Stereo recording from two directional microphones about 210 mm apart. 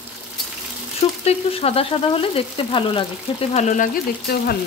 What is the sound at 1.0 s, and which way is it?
Speech, 30° left (ahead or behind).